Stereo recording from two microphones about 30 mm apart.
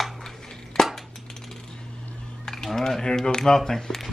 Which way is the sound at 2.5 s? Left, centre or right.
Centre.